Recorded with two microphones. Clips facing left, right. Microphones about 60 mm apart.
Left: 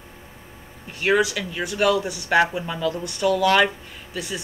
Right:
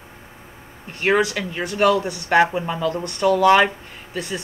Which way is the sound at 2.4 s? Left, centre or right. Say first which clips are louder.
Right 3 dB; right.